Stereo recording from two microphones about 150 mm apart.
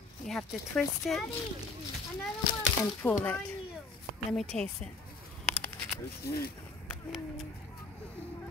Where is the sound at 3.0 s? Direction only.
20° left (ahead or behind).